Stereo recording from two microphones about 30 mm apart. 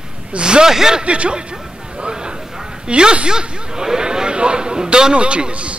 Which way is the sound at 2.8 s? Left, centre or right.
Right.